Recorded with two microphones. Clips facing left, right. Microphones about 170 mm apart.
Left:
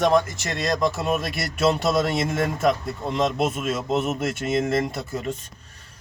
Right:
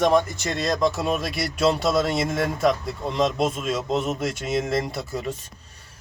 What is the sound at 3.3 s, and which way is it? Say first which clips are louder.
Speech: even; 5° left (ahead or behind).